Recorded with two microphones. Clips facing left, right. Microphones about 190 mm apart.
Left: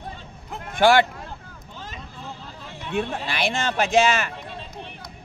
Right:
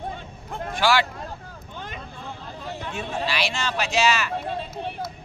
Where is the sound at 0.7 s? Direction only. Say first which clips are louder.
Left 5 dB; 55° left (ahead or behind).